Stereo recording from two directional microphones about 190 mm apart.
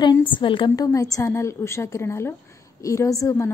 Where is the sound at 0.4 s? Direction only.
25° left (ahead or behind).